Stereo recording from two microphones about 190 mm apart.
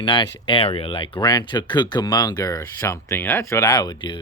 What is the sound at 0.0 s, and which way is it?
Speech, 25° left (ahead or behind).